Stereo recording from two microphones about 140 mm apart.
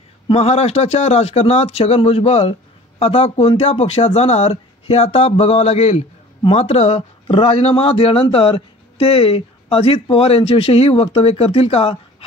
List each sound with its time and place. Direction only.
0.3 s speech: 50° left (ahead or behind)